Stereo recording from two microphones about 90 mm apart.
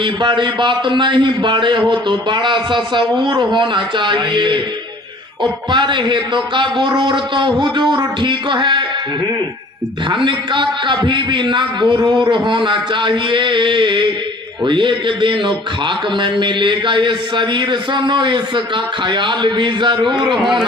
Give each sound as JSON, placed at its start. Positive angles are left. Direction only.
{"t": 0.0, "sound": "a man's voice", "side_deg": -60}
{"t": 10.1, "sound": "a man's voice", "side_deg": -65}
{"t": 20.3, "sound": "a man's voice", "side_deg": -5}